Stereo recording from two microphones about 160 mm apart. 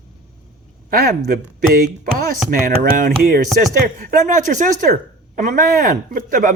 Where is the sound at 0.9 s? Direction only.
70° right (ahead or behind).